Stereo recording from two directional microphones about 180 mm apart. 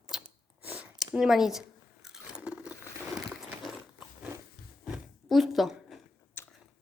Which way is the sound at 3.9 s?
10° right (ahead or behind).